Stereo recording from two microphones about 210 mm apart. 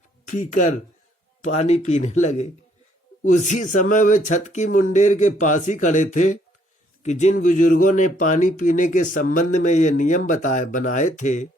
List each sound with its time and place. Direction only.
0.3 s speech: 35° left (ahead or behind)